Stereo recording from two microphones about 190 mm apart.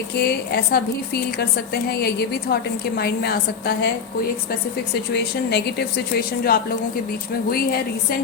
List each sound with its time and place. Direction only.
0.2 s a woman's voice: 55° left (ahead or behind)
5.1 s a woman's voice: 60° left (ahead or behind)